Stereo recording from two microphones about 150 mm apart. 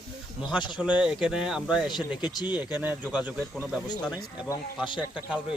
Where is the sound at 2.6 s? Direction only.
10° right (ahead or behind).